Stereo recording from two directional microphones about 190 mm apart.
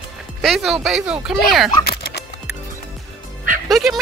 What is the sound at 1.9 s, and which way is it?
Music, 55° left (ahead or behind).